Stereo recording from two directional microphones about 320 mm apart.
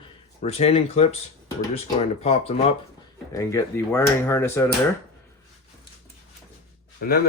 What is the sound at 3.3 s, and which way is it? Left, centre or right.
Speech, centre.